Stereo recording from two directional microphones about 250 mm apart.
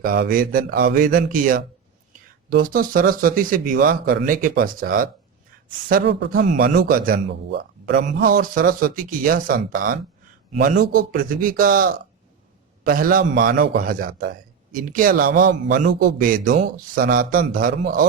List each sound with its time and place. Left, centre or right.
0.0 s speech: right